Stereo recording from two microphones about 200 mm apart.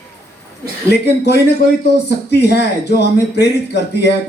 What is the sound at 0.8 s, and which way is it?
A man's voice, 55° left (ahead or behind).